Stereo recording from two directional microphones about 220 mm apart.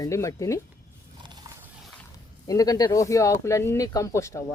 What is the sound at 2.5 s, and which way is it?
Speech, 15° left (ahead or behind).